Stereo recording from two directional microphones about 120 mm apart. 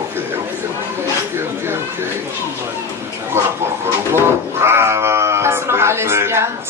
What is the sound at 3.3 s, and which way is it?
Speech, 20° right (ahead or behind).